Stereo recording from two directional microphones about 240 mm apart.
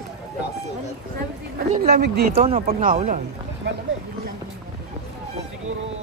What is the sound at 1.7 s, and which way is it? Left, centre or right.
Speech, right.